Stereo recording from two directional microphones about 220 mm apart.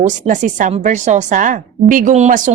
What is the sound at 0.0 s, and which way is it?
A woman's voice, 35° right (ahead or behind).